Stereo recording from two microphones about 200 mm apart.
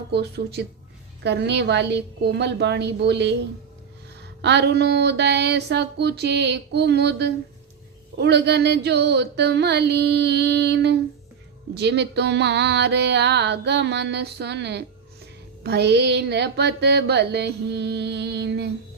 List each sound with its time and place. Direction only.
0.1 s music: 55° right (ahead or behind)
4.4 s music: 55° right (ahead or behind)